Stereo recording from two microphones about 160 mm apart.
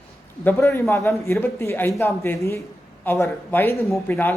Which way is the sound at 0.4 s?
15° left (ahead or behind).